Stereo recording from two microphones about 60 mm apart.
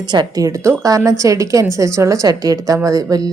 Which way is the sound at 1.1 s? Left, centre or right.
Right.